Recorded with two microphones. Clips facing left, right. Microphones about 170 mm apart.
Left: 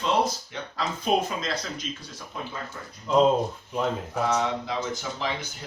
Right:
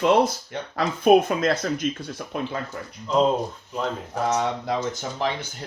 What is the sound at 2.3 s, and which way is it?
Speech, 70° right (ahead or behind).